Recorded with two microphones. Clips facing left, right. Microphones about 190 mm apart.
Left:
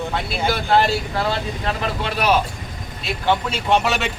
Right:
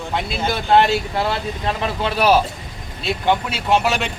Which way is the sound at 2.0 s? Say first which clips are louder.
Right 5 dB; 30° right (ahead or behind).